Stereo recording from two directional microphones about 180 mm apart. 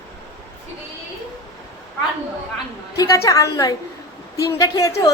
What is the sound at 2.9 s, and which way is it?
A woman's voice, 20° left (ahead or behind).